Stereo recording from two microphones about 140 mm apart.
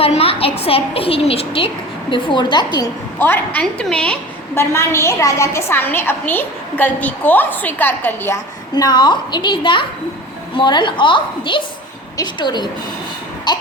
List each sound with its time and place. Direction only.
0.0 s a woman's voice: 45° left (ahead or behind)
3.2 s a woman's voice: 15° left (ahead or behind)
4.7 s a woman's voice: 20° left (ahead or behind)
8.7 s a woman's voice: 30° left (ahead or behind)
13.5 s a sound: 30° left (ahead or behind)